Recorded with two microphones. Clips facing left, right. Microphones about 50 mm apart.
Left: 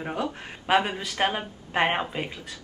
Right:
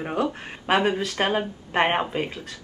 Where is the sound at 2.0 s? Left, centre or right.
Centre.